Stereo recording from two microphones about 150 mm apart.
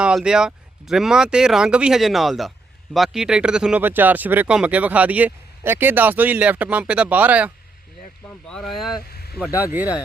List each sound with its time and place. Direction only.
0.0 s speech: 5° right (ahead or behind)
8.3 s speech: 5° left (ahead or behind)
9.1 s a sound: 90° left
9.4 s speech: 10° right (ahead or behind)